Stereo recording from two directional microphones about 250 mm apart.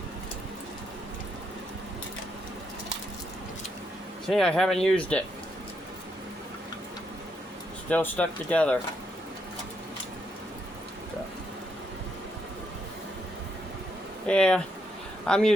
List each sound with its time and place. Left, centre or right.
4.3 s speech: centre
7.9 s speech: centre
14.3 s speech: centre